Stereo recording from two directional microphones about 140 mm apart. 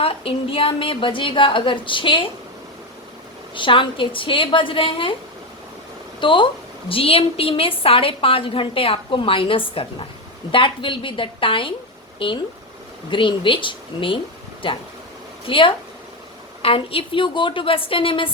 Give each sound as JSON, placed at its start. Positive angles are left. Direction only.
{"t": 0.0, "sound": "a woman's voice", "side_deg": 40}
{"t": 3.5, "sound": "a woman's voice", "side_deg": 35}
{"t": 6.1, "sound": "a woman's voice", "side_deg": 35}